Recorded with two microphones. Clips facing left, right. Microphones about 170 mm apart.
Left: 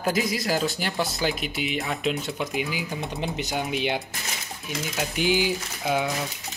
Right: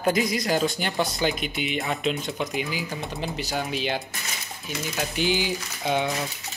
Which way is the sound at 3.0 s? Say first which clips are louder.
Left 1 dB; 20° left (ahead or behind).